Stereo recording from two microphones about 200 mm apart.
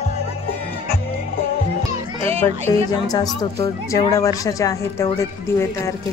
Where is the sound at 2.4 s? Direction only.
15° left (ahead or behind).